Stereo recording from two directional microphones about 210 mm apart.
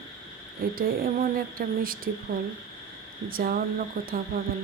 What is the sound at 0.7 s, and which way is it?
Speech, 45° right (ahead or behind).